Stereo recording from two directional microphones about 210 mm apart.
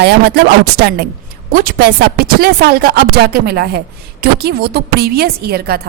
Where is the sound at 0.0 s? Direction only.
50° right (ahead or behind).